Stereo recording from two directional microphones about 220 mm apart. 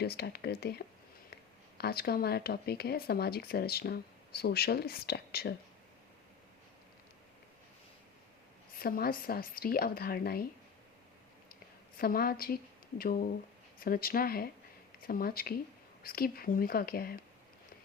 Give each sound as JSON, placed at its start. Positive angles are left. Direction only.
{"t": 0.0, "sound": "speech", "side_deg": 45}
{"t": 8.8, "sound": "speech", "side_deg": 40}
{"t": 11.9, "sound": "speech", "side_deg": 40}